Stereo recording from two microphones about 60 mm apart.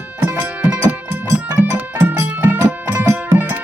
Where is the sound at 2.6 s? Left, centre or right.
Right.